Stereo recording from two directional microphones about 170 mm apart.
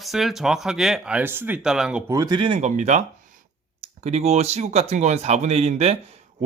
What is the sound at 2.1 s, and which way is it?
Speech, 20° right (ahead or behind).